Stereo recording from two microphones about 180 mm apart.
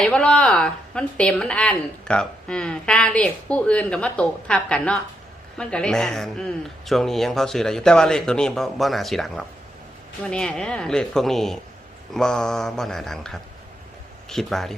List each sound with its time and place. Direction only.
0.0 s a woman's voice: 5° left (ahead or behind)